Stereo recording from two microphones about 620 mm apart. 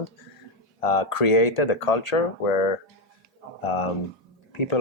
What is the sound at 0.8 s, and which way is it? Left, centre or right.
Speech, left.